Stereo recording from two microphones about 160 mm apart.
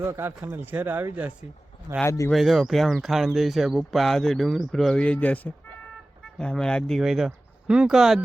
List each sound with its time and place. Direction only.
0.1 s speech: 15° right (ahead or behind)
2.0 s speech: 15° left (ahead or behind)
2.3 s speech: centre (ahead or behind)